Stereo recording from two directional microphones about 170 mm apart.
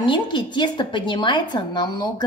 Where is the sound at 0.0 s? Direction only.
30° left (ahead or behind).